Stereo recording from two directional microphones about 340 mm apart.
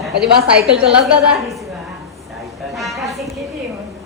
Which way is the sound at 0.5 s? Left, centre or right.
Centre.